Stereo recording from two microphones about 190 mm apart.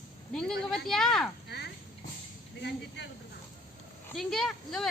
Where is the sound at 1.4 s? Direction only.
60° left (ahead or behind).